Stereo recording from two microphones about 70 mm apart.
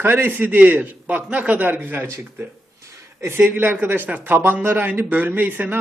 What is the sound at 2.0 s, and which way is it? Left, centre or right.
A man's voice, right.